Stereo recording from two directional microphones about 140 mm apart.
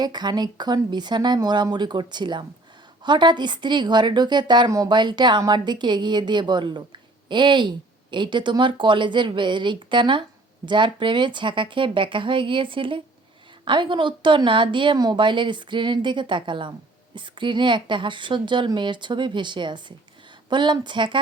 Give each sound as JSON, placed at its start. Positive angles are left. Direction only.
{"t": 0.0, "sound": "a woman's voice", "side_deg": -30}